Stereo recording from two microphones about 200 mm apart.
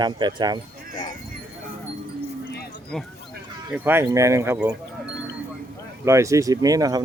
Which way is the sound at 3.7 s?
10° right (ahead or behind).